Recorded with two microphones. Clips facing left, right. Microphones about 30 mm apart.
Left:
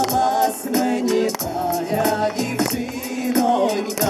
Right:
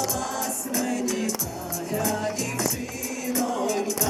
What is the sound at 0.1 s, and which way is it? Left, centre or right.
Music, left.